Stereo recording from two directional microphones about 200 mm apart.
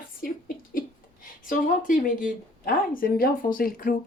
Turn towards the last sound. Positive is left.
turn(degrees=45)  # may be behind; listen again after turning